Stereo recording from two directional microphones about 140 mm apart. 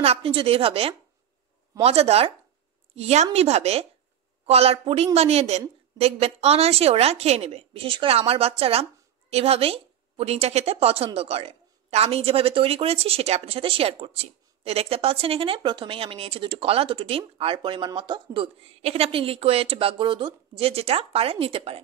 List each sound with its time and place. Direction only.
0.0 s speech: 45° right (ahead or behind)